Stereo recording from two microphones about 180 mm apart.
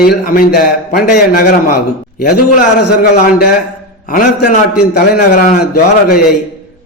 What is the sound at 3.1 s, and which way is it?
A man's voice, 55° left (ahead or behind).